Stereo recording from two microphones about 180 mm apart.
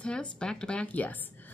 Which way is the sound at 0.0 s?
5° left (ahead or behind).